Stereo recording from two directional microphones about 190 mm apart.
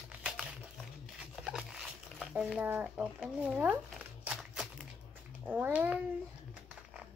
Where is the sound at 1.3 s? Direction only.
5° right (ahead or behind).